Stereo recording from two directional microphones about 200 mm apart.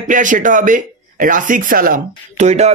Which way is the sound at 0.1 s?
40° right (ahead or behind).